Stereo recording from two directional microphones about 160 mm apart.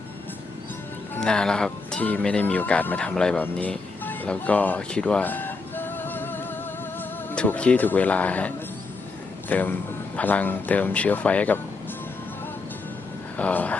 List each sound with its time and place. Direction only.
1.1 s speech: 5° left (ahead or behind)
13.3 s speech: 10° left (ahead or behind)